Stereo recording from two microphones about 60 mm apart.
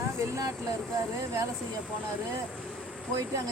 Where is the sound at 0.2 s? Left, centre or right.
Right.